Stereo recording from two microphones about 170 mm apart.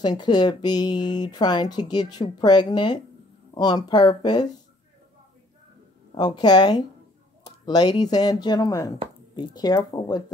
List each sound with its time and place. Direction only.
0.0 s speech: 25° left (ahead or behind)
6.1 s speech: 25° left (ahead or behind)